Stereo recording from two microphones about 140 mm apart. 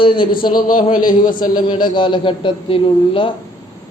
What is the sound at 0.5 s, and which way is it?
Speech, 80° left.